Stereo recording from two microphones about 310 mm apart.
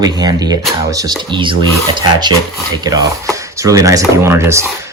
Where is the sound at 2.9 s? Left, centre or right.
Centre.